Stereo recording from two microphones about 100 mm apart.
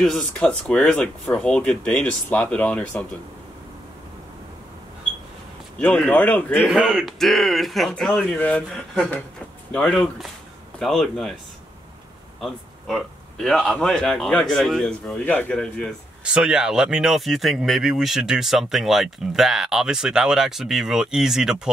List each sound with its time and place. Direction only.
0.0 s speech: 5° left (ahead or behind)
5.8 s speech: 15° left (ahead or behind)
6.6 s speech: centre (ahead or behind); by 8.6 s 15° left (ahead or behind)
8.6 s speech: 5° left (ahead or behind)
12.4 s speech: centre (ahead or behind)
16.3 s speech: 10° right (ahead or behind)